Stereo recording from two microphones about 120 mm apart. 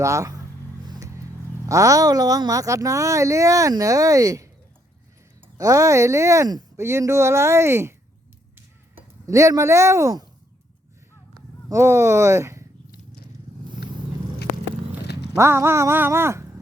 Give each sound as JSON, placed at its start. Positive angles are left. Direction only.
{"t": 0.0, "sound": "speech", "side_deg": -25}
{"t": 8.5, "sound": "a sound", "side_deg": -25}
{"t": 11.7, "sound": "speech", "side_deg": -25}
{"t": 15.4, "sound": "speech", "side_deg": -20}